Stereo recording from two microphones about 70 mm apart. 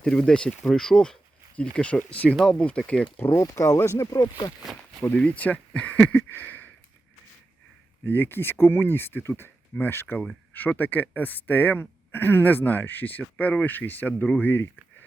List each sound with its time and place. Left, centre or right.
0.0 s speech: centre
2.4 s speech: centre
2.6 s speech: centre
3.3 s speech: left
4.6 s speech: centre
5.1 s a man's voice: centre
8.0 s a man's voice: left